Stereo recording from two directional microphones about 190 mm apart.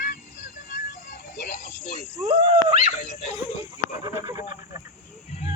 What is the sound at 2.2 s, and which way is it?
Speech, 30° right (ahead or behind).